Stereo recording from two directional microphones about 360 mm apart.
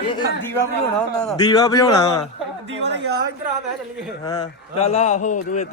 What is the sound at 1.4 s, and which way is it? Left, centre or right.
Speech, centre.